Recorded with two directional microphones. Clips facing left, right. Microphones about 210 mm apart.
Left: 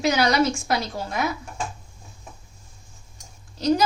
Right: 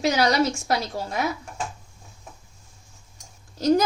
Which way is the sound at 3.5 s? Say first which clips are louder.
Right 2 dB; 45° right (ahead or behind).